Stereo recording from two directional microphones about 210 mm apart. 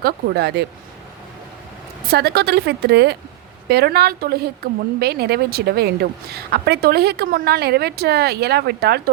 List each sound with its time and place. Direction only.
0.0 s speech: 50° right (ahead or behind)
2.0 s speech: 50° right (ahead or behind)